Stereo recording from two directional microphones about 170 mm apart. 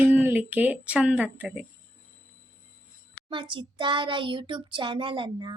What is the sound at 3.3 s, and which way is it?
A child's voice, 30° right (ahead or behind).